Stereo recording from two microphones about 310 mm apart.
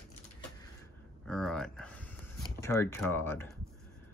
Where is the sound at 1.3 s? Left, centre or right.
Centre.